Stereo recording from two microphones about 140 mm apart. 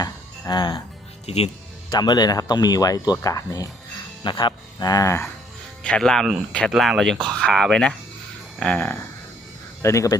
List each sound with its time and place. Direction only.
0.0 s a sound: 30° left (ahead or behind)
1.9 s speech: 30° left (ahead or behind)
5.8 s speech: 5° left (ahead or behind); by 10.2 s 20° left (ahead or behind)